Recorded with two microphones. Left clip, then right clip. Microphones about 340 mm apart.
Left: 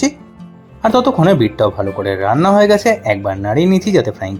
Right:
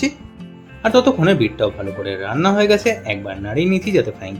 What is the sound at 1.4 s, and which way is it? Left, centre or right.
Speech, centre.